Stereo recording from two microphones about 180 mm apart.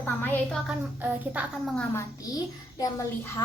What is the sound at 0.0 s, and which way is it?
Speech, 10° left (ahead or behind).